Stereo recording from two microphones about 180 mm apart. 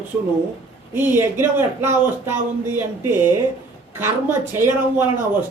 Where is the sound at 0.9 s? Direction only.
15° right (ahead or behind).